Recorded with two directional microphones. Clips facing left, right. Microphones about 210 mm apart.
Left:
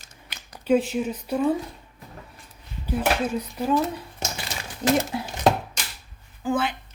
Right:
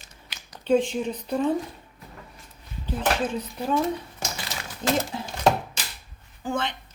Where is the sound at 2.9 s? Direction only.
10° left (ahead or behind).